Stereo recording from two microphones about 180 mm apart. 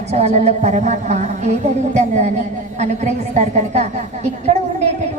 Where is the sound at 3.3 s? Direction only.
40° right (ahead or behind).